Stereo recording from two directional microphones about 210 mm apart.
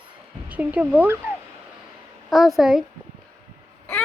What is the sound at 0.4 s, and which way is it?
A child's voice, 5° right (ahead or behind).